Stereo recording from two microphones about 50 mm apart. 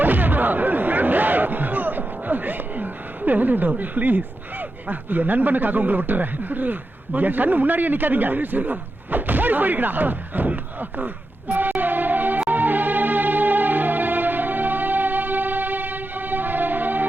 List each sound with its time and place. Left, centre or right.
0.0 s speech: right
12.5 s music: right